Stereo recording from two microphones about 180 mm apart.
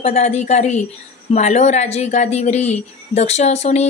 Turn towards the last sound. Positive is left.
turn(degrees=35)  # may be behind; listen again after turning